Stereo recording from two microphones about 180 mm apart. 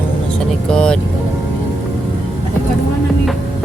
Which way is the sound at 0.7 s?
5° left (ahead or behind).